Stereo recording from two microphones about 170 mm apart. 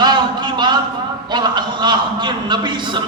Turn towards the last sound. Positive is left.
turn(degrees=-25)  # may be behind; listen again after turning